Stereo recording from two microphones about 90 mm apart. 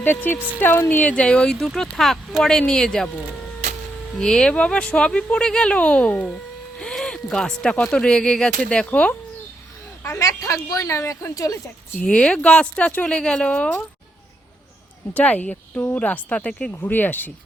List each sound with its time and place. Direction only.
0.0 s speech: 20° left (ahead or behind); by 3.1 s 5° left (ahead or behind)
4.2 s speech: 5° left (ahead or behind)
10.0 s speech: 30° left (ahead or behind)
11.9 s speech: 10° left (ahead or behind)
15.1 s speech: 15° left (ahead or behind)
16.7 s speech: 20° left (ahead or behind)